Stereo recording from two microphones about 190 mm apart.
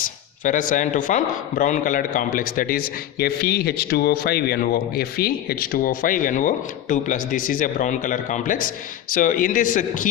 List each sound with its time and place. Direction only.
0.0 s speech: 45° left (ahead or behind)